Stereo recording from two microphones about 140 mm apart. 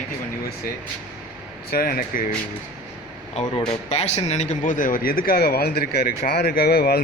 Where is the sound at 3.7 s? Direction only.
50° left (ahead or behind).